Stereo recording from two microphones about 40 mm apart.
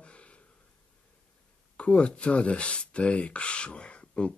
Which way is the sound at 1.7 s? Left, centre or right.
Left.